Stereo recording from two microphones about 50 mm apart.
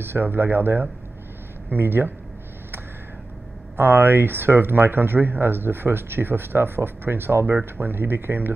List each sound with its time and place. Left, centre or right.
0.0 s speech: right
3.7 s speech: right